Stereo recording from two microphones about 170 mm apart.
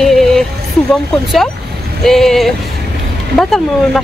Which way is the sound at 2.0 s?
Centre (ahead or behind).